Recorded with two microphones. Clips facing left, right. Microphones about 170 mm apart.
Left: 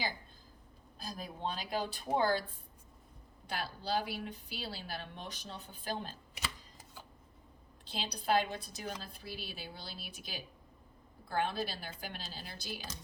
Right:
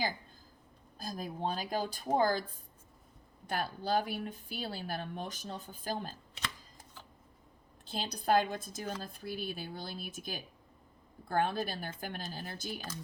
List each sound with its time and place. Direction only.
0.9 s a woman's voice: 45° right (ahead or behind)
3.4 s a woman's voice: 50° right (ahead or behind)
7.9 s a woman's voice: 45° right (ahead or behind)